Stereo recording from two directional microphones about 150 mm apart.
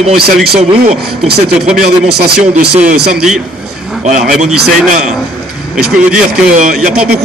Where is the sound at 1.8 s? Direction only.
90° right.